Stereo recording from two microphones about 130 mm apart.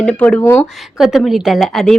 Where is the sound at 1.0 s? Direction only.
Centre (ahead or behind).